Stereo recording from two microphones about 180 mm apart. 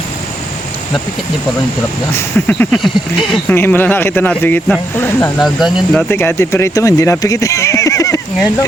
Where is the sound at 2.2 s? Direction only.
10° left (ahead or behind).